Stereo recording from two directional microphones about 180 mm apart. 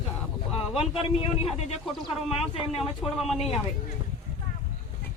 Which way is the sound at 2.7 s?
35° left (ahead or behind).